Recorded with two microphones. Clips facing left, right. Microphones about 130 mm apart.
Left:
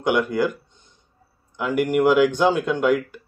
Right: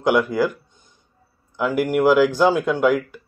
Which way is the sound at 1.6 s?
Centre (ahead or behind).